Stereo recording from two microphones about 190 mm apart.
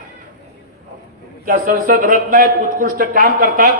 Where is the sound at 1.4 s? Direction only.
50° right (ahead or behind).